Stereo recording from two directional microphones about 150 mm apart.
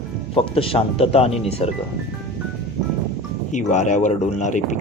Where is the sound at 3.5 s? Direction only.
50° left (ahead or behind).